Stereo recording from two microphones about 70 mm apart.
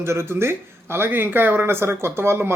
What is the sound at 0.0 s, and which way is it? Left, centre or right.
Speech, right.